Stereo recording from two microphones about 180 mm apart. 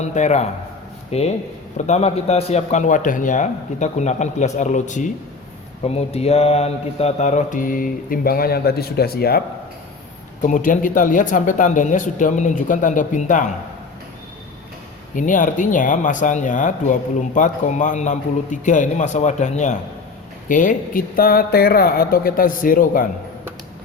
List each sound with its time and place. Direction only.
0.0 s a man's voice: 40° left (ahead or behind); by 9.4 s 60° left (ahead or behind)
10.4 s speech: 45° left (ahead or behind)
15.1 s speech: 45° left (ahead or behind)